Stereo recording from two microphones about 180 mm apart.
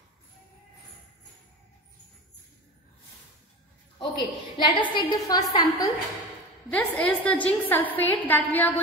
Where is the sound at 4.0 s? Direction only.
25° left (ahead or behind).